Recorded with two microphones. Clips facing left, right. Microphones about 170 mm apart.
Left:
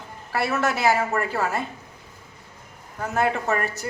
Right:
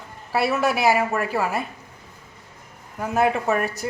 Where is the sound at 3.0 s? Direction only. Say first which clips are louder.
Right 3 dB; 10° right (ahead or behind).